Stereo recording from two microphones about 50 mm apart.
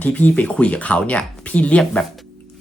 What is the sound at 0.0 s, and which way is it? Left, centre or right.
Speech, left.